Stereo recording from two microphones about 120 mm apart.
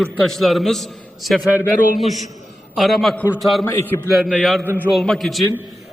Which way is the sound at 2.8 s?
Centre (ahead or behind).